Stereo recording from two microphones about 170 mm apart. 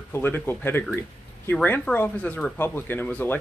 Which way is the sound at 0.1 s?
10° left (ahead or behind).